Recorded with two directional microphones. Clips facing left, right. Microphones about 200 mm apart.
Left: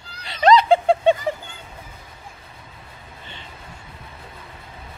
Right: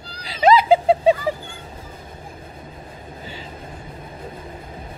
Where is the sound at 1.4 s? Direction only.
40° right (ahead or behind).